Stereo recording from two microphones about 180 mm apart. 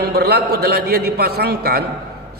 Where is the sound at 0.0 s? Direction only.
65° right (ahead or behind).